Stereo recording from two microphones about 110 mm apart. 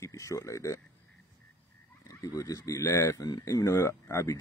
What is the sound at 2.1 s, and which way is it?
Speech, 30° left (ahead or behind).